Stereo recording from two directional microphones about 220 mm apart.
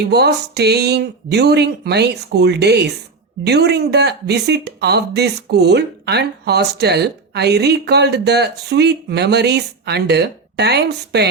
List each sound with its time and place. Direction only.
0.1 s speech: 50° right (ahead or behind)